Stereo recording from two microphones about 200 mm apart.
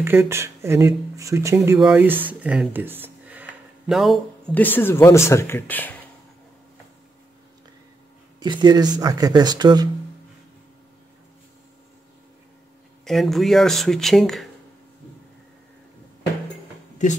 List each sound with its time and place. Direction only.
0.0 s speech: 10° right (ahead or behind); by 5.9 s 10° left (ahead or behind)
8.4 s speech: 20° right (ahead or behind)
13.0 s speech: centre (ahead or behind)